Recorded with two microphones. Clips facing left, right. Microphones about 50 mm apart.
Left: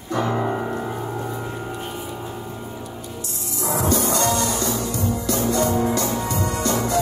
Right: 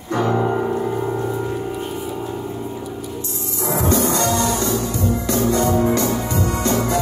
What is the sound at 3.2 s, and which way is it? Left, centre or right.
Music, right.